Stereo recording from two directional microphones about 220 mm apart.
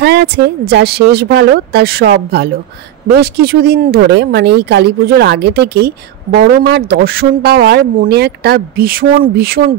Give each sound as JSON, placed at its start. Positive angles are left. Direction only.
{"t": 0.0, "sound": "speech", "side_deg": -45}